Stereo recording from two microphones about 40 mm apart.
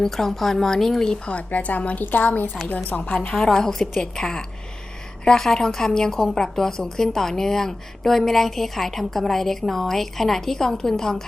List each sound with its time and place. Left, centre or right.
0.0 s speech: centre
1.1 s a woman's voice: left
1.4 s a woman's voice: left
3.0 s a woman's voice: left
3.3 s speech: centre